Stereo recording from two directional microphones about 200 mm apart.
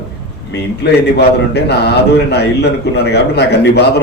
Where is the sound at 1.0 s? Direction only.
55° left (ahead or behind).